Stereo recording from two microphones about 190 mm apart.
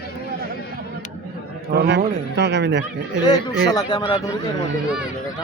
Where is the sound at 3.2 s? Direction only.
20° left (ahead or behind).